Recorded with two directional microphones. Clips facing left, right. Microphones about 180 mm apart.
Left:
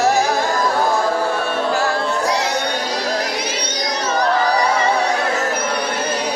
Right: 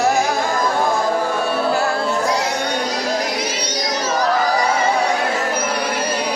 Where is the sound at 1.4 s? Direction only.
35° right (ahead or behind).